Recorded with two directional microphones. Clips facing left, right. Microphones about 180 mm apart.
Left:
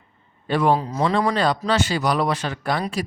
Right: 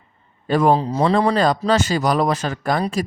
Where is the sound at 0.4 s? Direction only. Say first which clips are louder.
Right 3 dB; 45° right (ahead or behind).